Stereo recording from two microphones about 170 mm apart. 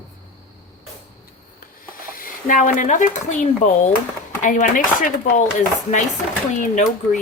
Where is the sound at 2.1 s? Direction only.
55° left (ahead or behind).